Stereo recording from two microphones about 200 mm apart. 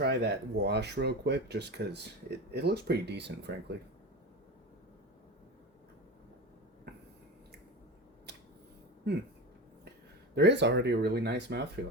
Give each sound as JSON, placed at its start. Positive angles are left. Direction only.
{"t": 0.0, "sound": "speech", "side_deg": -55}
{"t": 10.3, "sound": "speech", "side_deg": -60}